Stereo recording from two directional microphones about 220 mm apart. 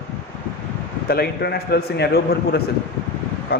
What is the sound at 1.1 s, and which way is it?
Speech, 45° left (ahead or behind).